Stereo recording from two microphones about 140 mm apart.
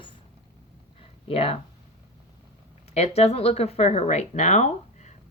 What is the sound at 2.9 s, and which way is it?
Speech, 50° left (ahead or behind).